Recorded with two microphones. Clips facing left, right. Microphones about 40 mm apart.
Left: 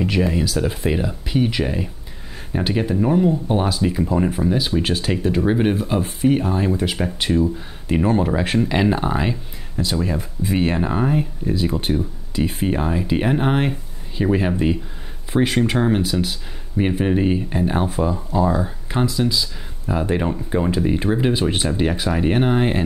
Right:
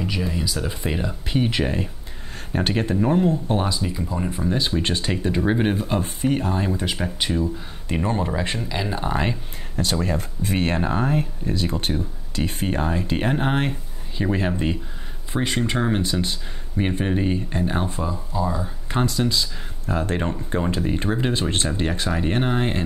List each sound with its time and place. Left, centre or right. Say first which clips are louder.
0.3 s speech: left 6 dB; centre
0.8 s speech: left 3 dB; centre
1.2 s speech: even; centre
3.8 s speech: left 7 dB; left
4.3 s speech: left 3 dB; centre
9.1 s speech: left 2 dB; centre
18.0 s speech: left 6 dB; left
18.9 s speech: left 1 dB; centre
19.9 s speech: left 3 dB; centre